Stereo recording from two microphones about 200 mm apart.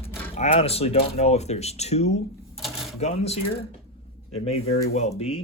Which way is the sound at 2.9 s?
30° left (ahead or behind).